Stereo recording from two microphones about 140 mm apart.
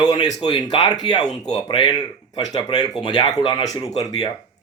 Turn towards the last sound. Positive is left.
turn(degrees=25)  # may be behind; listen again after turning